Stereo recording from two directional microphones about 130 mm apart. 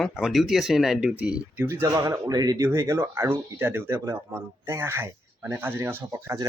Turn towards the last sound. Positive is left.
turn(degrees=-25)  # may be behind; listen again after turning